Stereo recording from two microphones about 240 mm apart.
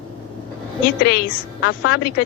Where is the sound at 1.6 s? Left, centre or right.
Left.